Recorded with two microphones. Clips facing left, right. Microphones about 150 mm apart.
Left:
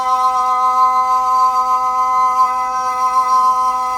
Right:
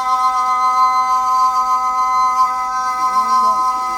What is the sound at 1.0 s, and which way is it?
Music, 25° left (ahead or behind).